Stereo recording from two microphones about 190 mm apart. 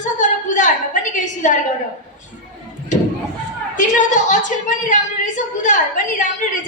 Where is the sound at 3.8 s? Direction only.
40° left (ahead or behind).